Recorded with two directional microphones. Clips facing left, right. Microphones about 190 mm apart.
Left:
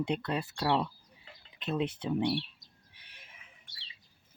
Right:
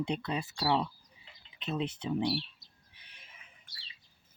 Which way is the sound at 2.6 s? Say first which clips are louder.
Left 2 dB; 60° left (ahead or behind).